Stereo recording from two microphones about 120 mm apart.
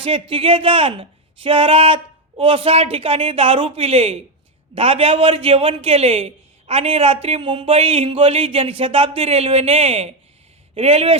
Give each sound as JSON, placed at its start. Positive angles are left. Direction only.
{"t": 0.0, "sound": "a man's voice", "side_deg": -50}